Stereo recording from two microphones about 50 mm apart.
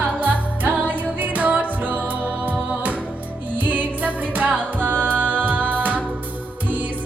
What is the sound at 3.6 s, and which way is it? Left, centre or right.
Music, right.